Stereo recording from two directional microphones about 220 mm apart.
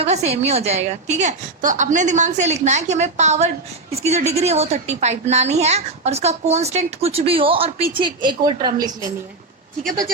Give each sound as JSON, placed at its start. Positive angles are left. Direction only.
{"t": 0.0, "sound": "a woman's voice", "side_deg": -30}